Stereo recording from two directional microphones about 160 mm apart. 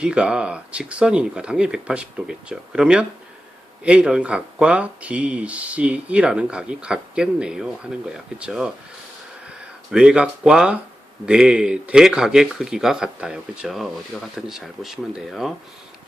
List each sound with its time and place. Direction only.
0.0 s speech: 5° right (ahead or behind)